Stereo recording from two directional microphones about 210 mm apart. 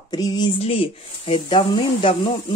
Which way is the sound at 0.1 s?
20° left (ahead or behind).